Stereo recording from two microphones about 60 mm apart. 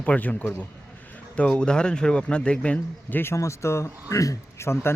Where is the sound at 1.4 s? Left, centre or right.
Centre.